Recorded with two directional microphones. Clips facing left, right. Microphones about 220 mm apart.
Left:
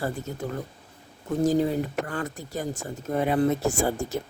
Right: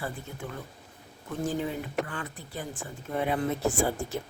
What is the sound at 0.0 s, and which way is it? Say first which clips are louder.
Speech: left 7 dB; 40° left (ahead or behind).